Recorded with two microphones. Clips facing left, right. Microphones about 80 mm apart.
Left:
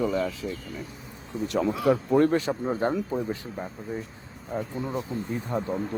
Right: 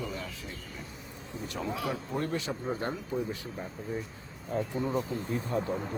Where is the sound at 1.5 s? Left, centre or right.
Left.